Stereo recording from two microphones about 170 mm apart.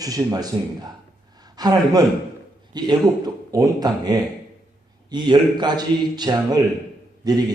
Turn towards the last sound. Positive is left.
turn(degrees=-25)  # may be behind; listen again after turning